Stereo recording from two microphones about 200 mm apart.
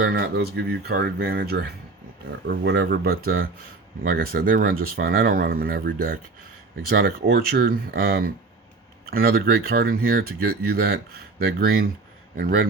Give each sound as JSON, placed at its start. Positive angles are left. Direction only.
{"t": 0.0, "sound": "speech", "side_deg": -55}